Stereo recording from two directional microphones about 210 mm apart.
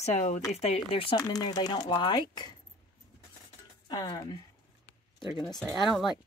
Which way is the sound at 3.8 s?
20° left (ahead or behind).